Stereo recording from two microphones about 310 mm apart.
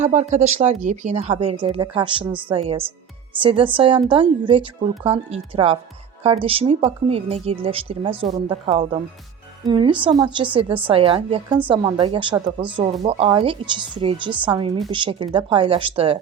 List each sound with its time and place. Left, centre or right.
0.0 s a woman's voice: right